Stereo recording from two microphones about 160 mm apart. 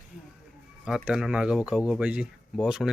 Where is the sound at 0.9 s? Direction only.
Centre (ahead or behind).